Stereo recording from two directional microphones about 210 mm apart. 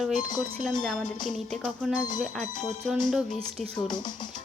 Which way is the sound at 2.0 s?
20° left (ahead or behind).